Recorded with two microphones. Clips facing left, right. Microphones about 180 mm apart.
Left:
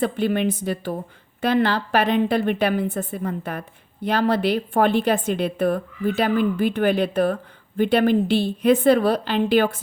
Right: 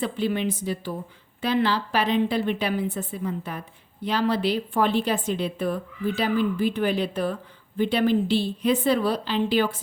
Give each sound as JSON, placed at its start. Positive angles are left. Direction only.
{"t": 0.0, "sound": "a woman's voice", "side_deg": 55}